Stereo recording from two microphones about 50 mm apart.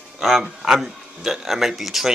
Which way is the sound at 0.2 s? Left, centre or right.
Centre.